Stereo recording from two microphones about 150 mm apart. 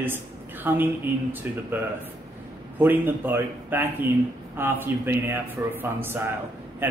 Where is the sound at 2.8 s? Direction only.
15° right (ahead or behind).